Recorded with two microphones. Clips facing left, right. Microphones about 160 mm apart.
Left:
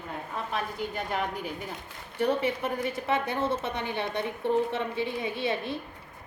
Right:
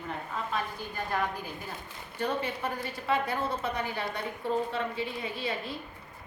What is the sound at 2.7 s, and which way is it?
A woman's voice, 20° left (ahead or behind).